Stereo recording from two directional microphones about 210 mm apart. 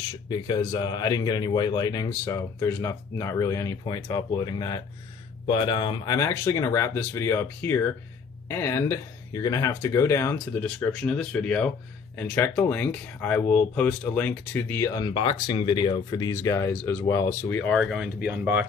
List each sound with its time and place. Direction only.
0.1 s speech: 20° left (ahead or behind); by 18.7 s 10° right (ahead or behind)